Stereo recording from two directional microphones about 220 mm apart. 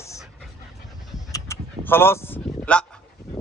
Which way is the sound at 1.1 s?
15° left (ahead or behind).